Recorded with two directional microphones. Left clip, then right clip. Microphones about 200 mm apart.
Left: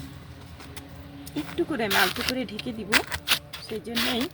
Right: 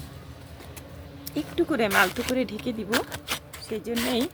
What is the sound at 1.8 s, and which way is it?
Speech, centre (ahead or behind).